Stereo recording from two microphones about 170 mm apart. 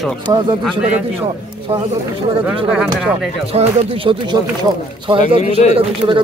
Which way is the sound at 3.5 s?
30° right (ahead or behind).